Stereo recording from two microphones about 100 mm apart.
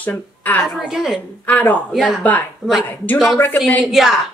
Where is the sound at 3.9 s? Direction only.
5° right (ahead or behind).